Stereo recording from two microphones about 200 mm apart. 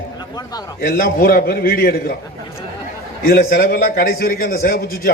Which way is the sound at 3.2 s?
50° left (ahead or behind).